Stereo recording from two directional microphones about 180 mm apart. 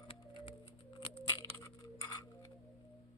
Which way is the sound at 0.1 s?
25° left (ahead or behind).